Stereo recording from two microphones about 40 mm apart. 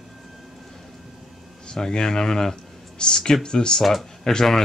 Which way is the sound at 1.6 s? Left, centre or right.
Centre.